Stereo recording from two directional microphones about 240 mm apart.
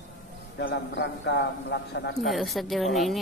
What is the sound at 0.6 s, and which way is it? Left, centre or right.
A man's voice, left.